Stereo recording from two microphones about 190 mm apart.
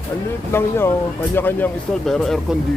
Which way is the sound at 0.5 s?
10° left (ahead or behind).